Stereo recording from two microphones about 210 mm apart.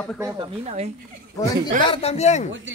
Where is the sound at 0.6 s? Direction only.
30° right (ahead or behind).